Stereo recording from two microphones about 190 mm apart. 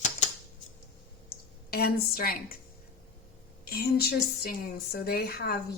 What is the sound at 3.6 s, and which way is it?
A woman's voice, 55° left (ahead or behind).